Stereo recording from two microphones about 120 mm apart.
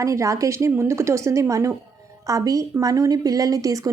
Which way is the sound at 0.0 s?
25° right (ahead or behind).